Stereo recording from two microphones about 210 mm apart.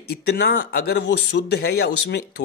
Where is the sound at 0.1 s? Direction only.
50° left (ahead or behind).